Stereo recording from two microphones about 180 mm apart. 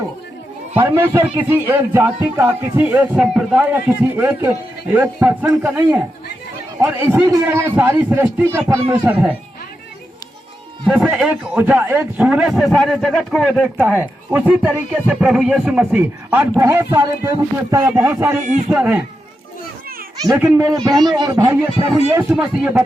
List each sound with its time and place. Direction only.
0.7 s a man's voice: 10° right (ahead or behind)
10.8 s a man's voice: 5° right (ahead or behind)
20.2 s speech: 15° right (ahead or behind)
21.4 s a man's voice: 15° right (ahead or behind)